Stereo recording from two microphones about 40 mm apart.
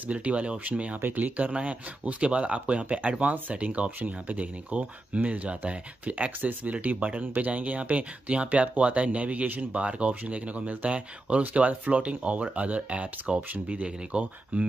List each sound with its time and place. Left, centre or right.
0.0 s speech: right